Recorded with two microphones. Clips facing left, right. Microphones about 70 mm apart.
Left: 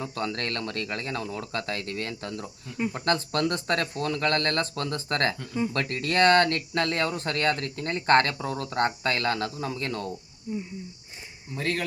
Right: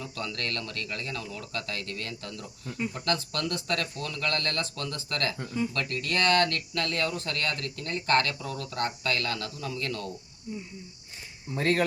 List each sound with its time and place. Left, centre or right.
0.0 s speech: left
11.5 s speech: right